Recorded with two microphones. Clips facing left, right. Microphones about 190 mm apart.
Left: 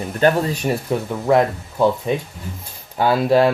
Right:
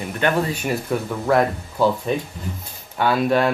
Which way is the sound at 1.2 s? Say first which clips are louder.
Left 3 dB; 20° left (ahead or behind).